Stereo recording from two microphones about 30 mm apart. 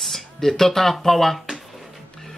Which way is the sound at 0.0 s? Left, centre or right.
Centre.